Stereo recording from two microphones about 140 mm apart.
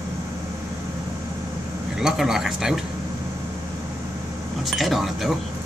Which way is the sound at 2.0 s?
5° right (ahead or behind).